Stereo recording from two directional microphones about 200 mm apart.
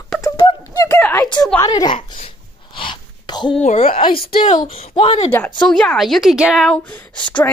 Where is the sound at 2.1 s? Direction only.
30° left (ahead or behind).